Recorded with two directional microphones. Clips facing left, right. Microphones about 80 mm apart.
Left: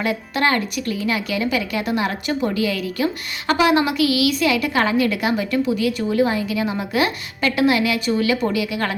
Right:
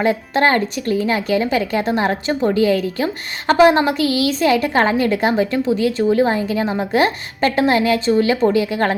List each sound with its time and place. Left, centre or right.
0.0 s a woman's voice: right